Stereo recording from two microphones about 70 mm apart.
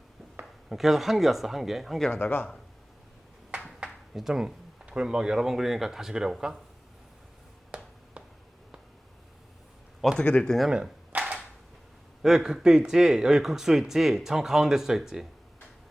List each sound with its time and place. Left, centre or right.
0.7 s speech: centre
2.1 s speech: left
3.8 s speech: centre
7.7 s a sound: centre
10.2 s speech: centre
10.7 s speech: centre
11.1 s a sound: right
12.2 s speech: centre